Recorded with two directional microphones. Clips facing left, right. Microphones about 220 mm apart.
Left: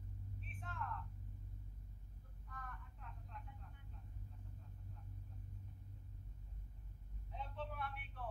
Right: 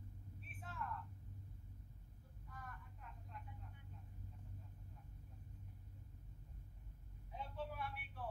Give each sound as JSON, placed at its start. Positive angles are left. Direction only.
{"t": 0.4, "sound": "vehicle", "side_deg": -5}
{"t": 2.5, "sound": "vehicle", "side_deg": -5}
{"t": 7.3, "sound": "a sound", "side_deg": -10}